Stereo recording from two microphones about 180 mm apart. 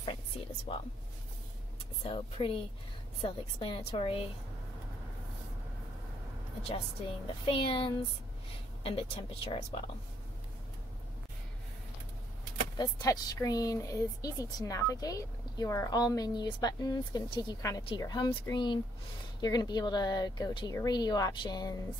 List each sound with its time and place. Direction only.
2.0 s speech: 30° left (ahead or behind)
6.7 s speech: 30° left (ahead or behind)
12.7 s speech: 20° left (ahead or behind)